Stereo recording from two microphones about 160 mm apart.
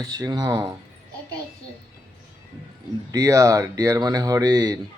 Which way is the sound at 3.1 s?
20° right (ahead or behind).